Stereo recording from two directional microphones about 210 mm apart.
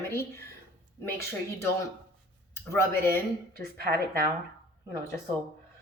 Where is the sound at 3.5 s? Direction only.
45° right (ahead or behind).